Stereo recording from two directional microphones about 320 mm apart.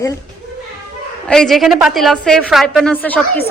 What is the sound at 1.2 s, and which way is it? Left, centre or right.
A woman's voice, centre.